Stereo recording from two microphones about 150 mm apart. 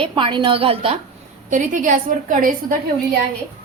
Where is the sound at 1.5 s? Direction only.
60° right (ahead or behind).